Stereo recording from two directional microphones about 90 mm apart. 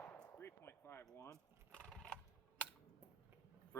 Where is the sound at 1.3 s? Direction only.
10° left (ahead or behind).